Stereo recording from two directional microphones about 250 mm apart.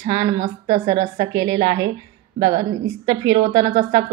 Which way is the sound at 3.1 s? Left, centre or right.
Centre.